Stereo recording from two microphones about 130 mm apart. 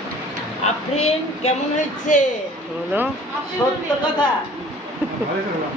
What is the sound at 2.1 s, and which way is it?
Speech, 75° left (ahead or behind).